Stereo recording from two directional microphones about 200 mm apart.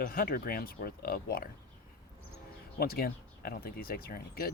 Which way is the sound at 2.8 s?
50° left (ahead or behind).